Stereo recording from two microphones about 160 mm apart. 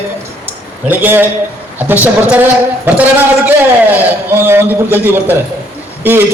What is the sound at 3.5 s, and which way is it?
A man's voice, 15° right (ahead or behind).